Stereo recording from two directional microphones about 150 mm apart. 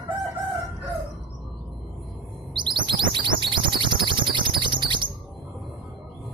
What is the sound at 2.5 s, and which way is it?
Music, 30° right (ahead or behind).